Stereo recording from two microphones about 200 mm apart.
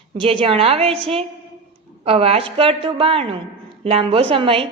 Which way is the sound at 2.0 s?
30° right (ahead or behind).